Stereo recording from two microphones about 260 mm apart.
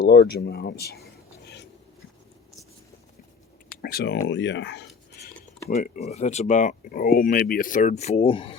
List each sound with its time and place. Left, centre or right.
0.0 s speech: left
3.8 s speech: left
5.6 s speech: left